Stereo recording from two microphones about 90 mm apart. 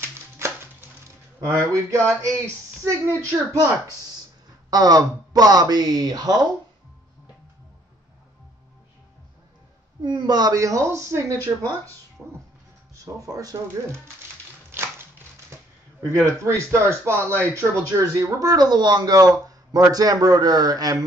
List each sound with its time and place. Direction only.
0.0 s a sound: 25° right (ahead or behind)
1.5 s speech: 35° right (ahead or behind)
4.6 s speech: 45° right (ahead or behind)
10.0 s speech: 55° right (ahead or behind); by 11.9 s 35° right (ahead or behind)
12.2 s music: 15° right (ahead or behind)
12.9 s speech: 40° right (ahead or behind)
14.7 s a sound: 25° right (ahead or behind)
16.1 s speech: 35° right (ahead or behind)